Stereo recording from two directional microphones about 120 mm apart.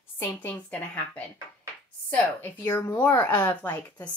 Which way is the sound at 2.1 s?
15° left (ahead or behind).